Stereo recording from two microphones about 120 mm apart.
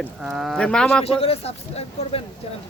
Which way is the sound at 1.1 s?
55° left (ahead or behind).